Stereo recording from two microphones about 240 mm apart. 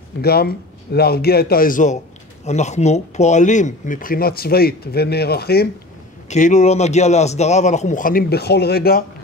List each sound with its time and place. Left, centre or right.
0.2 s speech: left
6.2 s a man's voice: left